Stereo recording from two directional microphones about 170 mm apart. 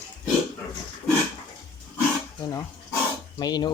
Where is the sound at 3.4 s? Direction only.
25° left (ahead or behind).